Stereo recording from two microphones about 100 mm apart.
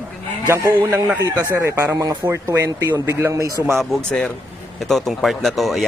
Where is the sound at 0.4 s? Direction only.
25° right (ahead or behind).